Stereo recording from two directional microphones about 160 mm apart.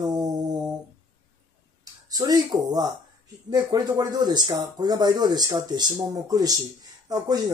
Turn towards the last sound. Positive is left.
turn(degrees=-25)  # may be behind; listen again after turning